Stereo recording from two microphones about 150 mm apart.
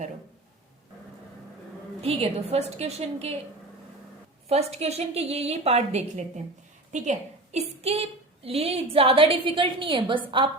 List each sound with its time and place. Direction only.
2.0 s a woman's voice: 40° right (ahead or behind)
4.4 s a woman's voice: 45° right (ahead or behind)